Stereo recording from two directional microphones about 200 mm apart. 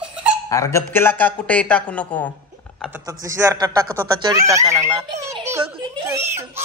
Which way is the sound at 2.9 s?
15° right (ahead or behind).